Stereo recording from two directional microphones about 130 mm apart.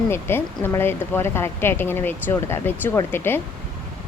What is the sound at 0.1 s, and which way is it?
A woman's voice, 15° left (ahead or behind).